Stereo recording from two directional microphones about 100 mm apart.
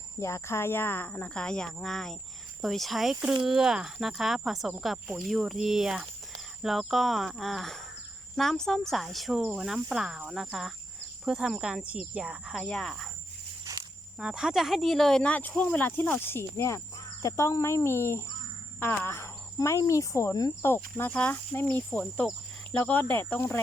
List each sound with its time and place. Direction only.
0.2 s insect: 30° left (ahead or behind); by 2.1 s 5° left (ahead or behind)
2.6 s speech: centre (ahead or behind)
12.5 s speech: 5° left (ahead or behind)
14.2 s speech: 5° right (ahead or behind); by 20.7 s 35° left (ahead or behind)
20.7 s speech: 20° left (ahead or behind)
22.8 s insect: 15° left (ahead or behind)